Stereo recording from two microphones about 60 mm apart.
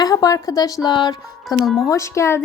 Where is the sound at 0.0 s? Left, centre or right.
Left.